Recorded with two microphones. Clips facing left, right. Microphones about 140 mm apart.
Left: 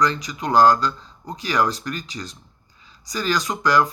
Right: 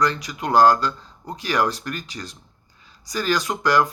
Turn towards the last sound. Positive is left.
turn(degrees=-55)  # may be behind; listen again after turning